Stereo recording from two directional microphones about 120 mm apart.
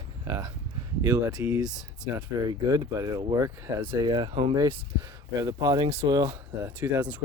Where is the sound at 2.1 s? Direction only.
30° right (ahead or behind).